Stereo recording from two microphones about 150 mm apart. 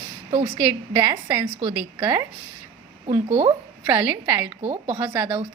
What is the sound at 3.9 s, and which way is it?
Speech, 10° right (ahead or behind).